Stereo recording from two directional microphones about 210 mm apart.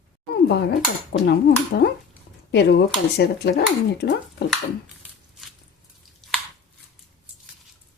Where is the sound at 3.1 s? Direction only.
50° left (ahead or behind).